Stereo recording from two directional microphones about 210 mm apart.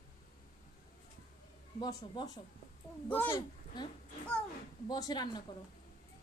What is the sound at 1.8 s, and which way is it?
Speech, 20° left (ahead or behind).